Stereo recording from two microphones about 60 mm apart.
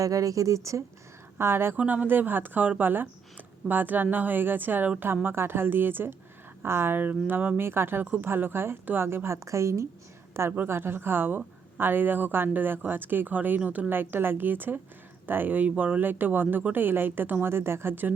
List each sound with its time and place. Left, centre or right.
0.0 s speech: right
1.4 s speech: right
1.7 s a woman's voice: right